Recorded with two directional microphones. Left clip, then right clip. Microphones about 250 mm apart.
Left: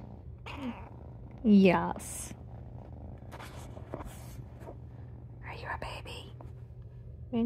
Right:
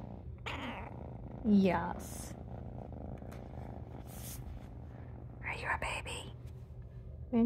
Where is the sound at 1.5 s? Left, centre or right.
Left.